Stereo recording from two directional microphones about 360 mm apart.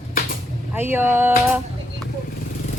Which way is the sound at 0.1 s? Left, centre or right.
Left.